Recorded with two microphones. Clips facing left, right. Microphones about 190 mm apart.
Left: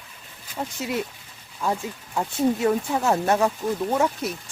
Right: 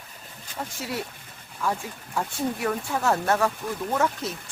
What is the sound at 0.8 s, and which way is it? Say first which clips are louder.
Speech: left 5 dB; 20° left (ahead or behind).